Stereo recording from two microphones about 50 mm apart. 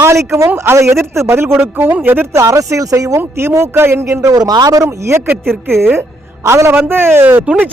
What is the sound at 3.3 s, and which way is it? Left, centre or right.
Speech, right.